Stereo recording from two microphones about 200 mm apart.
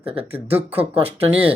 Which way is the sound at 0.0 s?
30° right (ahead or behind).